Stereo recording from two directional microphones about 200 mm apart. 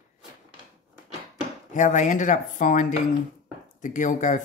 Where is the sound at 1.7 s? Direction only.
40° left (ahead or behind).